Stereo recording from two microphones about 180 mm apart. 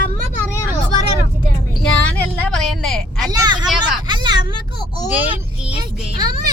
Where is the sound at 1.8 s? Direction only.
5° left (ahead or behind).